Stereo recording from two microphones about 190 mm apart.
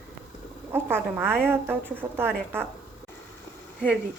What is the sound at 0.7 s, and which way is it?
A woman's voice, 10° right (ahead or behind).